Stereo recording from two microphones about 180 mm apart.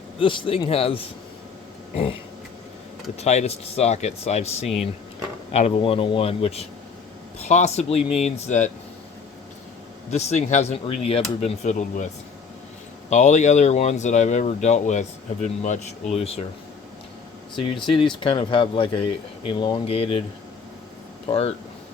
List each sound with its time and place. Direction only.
0.2 s speech: 30° left (ahead or behind)
3.2 s speech: 40° left (ahead or behind)
10.1 s speech: 35° left (ahead or behind)
13.1 s speech: 40° left (ahead or behind)
17.5 s speech: 30° left (ahead or behind)
21.2 s speech: 30° left (ahead or behind)